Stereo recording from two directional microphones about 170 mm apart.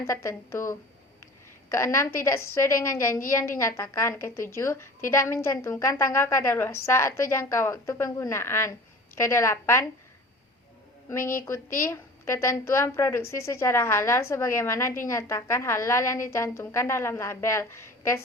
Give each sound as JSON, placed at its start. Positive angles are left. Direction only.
{"t": 0.0, "sound": "a woman's voice", "side_deg": 15}
{"t": 11.1, "sound": "a woman's voice", "side_deg": 15}